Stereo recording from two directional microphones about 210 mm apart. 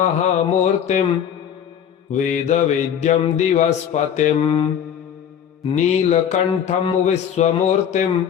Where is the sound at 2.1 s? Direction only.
35° left (ahead or behind).